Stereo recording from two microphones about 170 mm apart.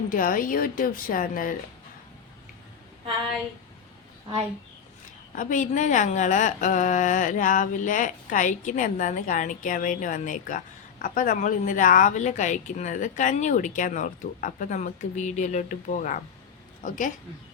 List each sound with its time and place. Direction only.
0.1 s a woman's voice: 55° left (ahead or behind)
5.3 s a woman's voice: 50° left (ahead or behind)